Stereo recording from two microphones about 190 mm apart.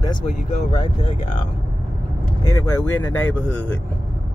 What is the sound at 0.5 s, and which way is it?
Speech, 30° left (ahead or behind).